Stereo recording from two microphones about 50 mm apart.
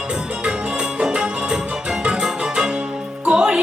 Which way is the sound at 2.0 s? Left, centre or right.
Centre.